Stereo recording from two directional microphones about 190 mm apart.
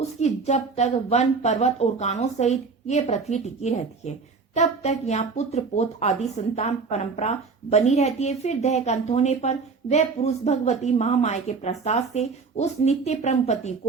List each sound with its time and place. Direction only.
0.2 s speech: 35° left (ahead or behind)